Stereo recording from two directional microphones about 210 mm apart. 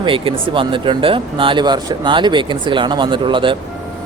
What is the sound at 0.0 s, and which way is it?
Speech, 25° right (ahead or behind).